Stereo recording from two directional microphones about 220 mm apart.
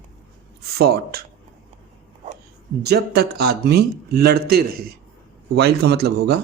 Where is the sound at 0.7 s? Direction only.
45° right (ahead or behind).